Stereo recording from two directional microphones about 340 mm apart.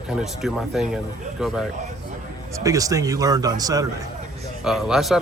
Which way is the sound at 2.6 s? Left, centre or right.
Centre.